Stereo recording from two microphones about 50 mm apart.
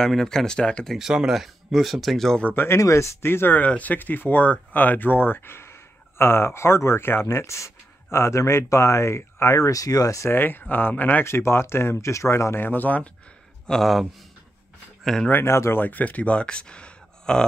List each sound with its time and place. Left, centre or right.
0.0 s speech: centre
0.9 s speech: centre
2.5 s speech: left
2.8 s speech: left
3.3 s speech: left
3.5 s speech: left
10.3 s speech: left
11.2 s speech: left
12.0 s speech: left
12.5 s speech: left
13.7 s speech: centre
15.1 s speech: centre
15.4 s speech: left
15.8 s speech: left; by 17.5 s centre